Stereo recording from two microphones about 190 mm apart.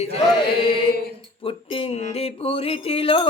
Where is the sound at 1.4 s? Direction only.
30° left (ahead or behind).